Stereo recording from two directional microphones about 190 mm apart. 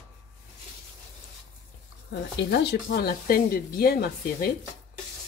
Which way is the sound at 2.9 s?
55° left (ahead or behind).